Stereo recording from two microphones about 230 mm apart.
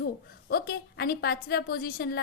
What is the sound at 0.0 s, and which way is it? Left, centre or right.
A woman's voice, left.